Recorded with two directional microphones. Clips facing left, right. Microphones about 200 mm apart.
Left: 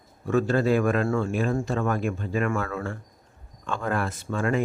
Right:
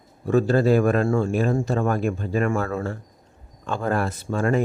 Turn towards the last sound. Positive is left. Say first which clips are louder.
# right 3 dB
turn(degrees=-40)  # may be behind; listen again after turning